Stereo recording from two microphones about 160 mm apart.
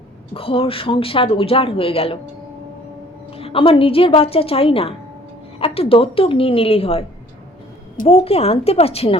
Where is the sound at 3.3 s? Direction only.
35° left (ahead or behind).